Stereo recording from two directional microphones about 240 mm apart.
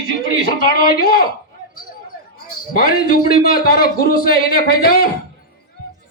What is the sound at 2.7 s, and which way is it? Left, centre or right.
A man's voice, left.